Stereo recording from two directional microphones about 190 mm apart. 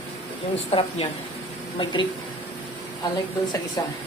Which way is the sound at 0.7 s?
30° left (ahead or behind).